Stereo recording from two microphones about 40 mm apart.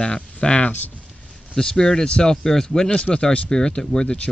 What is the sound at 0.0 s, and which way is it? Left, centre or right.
Speech, left.